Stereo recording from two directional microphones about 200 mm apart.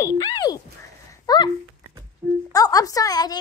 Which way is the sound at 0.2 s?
20° left (ahead or behind).